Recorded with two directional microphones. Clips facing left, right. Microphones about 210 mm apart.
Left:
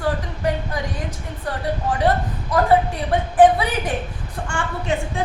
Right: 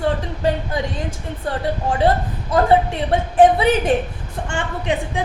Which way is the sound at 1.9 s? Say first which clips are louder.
Right 2 dB; 25° right (ahead or behind).